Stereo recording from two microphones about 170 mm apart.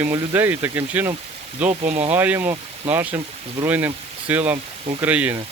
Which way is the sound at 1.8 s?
40° right (ahead or behind).